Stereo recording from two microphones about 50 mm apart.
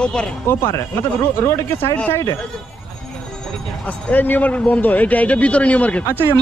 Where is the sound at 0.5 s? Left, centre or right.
Left.